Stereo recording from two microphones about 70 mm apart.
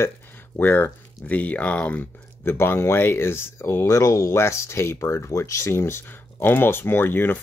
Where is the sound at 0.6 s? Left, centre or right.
Left.